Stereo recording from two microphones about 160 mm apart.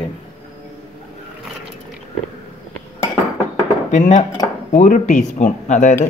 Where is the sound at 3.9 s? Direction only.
50° left (ahead or behind).